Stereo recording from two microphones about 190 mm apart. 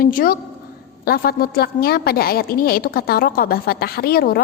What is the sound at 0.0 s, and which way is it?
A woman's voice, 50° left (ahead or behind).